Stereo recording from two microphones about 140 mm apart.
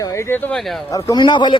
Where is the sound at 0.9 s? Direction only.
25° left (ahead or behind).